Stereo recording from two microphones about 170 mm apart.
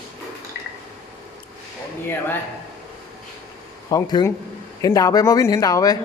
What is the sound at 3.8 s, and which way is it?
Speech, 25° left (ahead or behind).